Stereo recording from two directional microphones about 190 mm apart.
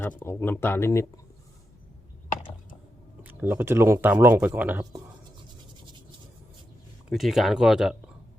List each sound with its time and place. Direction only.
0.2 s speech: 10° left (ahead or behind)
3.2 s speech: 10° right (ahead or behind)
5.8 s a sound: 25° right (ahead or behind)
7.1 s speech: centre (ahead or behind)